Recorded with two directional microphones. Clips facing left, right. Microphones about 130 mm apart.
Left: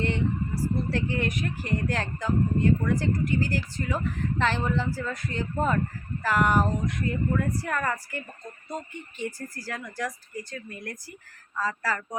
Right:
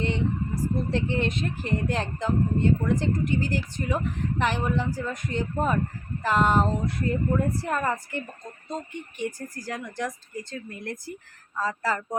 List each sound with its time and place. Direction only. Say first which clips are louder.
0.0 s a sound: even; 20° right (ahead or behind)
0.9 s speech: right 2 dB; 25° right (ahead or behind)
6.9 s speech: right 2 dB; 35° right (ahead or behind)